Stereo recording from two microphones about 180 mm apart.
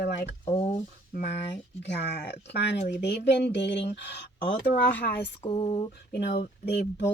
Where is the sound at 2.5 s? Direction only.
70° left (ahead or behind).